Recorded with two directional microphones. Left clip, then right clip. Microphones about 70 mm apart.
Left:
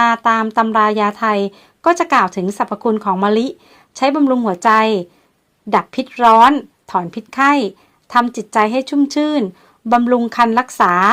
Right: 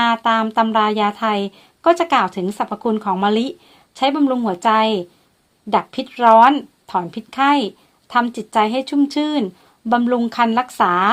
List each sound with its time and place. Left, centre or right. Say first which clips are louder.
0.0 s a woman's voice: left 3 dB; centre
6.6 s a sound: left 2 dB; left
7.1 s a woman's voice: left 2 dB; left